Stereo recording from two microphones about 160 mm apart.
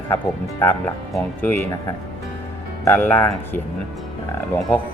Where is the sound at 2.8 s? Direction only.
15° left (ahead or behind).